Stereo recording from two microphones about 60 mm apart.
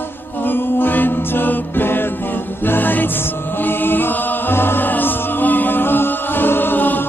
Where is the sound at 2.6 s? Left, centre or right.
Left.